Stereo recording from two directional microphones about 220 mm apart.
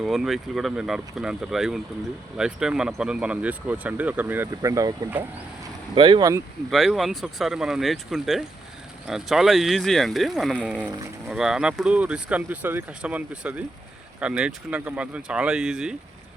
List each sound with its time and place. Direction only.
0.0 s speech: centre (ahead or behind); by 6.4 s 15° right (ahead or behind)
6.7 s speech: centre (ahead or behind)